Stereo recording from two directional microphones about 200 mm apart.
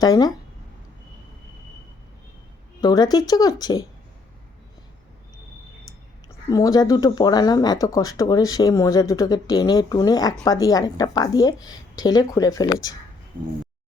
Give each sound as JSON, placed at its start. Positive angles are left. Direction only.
{"t": 0.0, "sound": "speech", "side_deg": 20}
{"t": 2.8, "sound": "speech", "side_deg": 20}
{"t": 6.2, "sound": "speech", "side_deg": 20}